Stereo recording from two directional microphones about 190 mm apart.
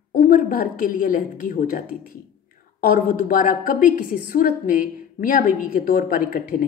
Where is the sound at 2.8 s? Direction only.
45° left (ahead or behind).